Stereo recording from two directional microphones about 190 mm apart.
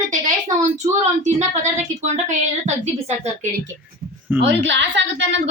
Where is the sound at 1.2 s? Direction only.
40° right (ahead or behind).